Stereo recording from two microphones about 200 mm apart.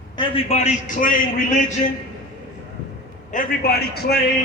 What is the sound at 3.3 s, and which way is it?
Speech, 45° left (ahead or behind).